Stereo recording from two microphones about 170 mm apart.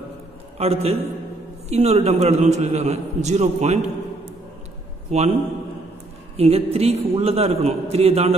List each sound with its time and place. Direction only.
0.6 s a man's voice: 35° right (ahead or behind)
5.1 s a man's voice: 40° right (ahead or behind)
6.3 s a man's voice: 35° right (ahead or behind)